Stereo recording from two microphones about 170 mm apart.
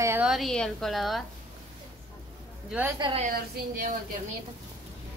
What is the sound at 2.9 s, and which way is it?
Speech, 30° right (ahead or behind).